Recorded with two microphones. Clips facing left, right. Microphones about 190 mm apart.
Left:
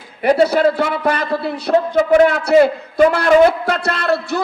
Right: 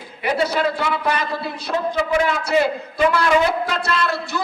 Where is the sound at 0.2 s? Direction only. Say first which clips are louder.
Left 7 dB; 45° left (ahead or behind).